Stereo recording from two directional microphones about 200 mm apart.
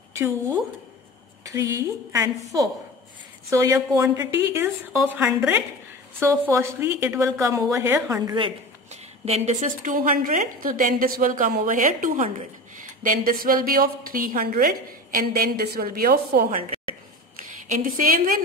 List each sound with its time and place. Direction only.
1.4 s a woman's voice: 15° right (ahead or behind)
9.2 s a woman's voice: 35° right (ahead or behind)
16.4 s a woman's voice: 30° right (ahead or behind)
17.6 s a woman's voice: 45° right (ahead or behind)